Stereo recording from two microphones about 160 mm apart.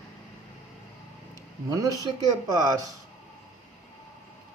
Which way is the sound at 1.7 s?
20° right (ahead or behind).